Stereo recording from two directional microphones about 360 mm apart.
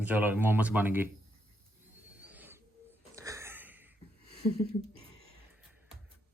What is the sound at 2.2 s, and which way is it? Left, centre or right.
Owl, centre.